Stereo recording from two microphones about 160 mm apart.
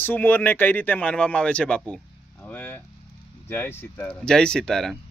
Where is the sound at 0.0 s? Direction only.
10° left (ahead or behind).